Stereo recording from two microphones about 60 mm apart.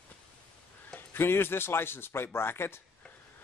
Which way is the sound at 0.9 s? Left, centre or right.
Left.